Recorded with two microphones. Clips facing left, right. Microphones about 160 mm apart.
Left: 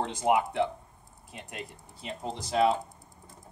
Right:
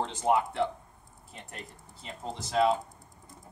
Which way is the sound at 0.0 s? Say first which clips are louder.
Left 1 dB; 15° left (ahead or behind).